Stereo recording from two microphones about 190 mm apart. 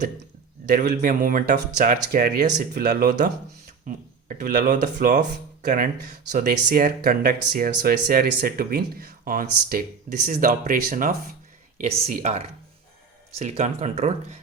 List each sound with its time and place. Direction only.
0.7 s speech: 45° right (ahead or behind)
11.8 s speech: 35° right (ahead or behind)